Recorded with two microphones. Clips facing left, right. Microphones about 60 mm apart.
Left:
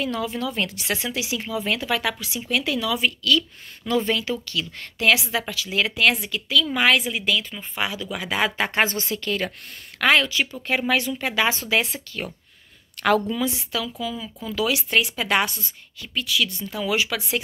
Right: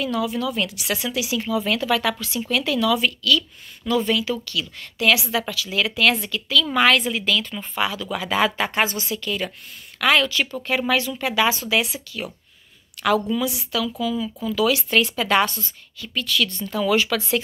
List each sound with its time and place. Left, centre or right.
0.0 s speech: left
9.9 s speech: left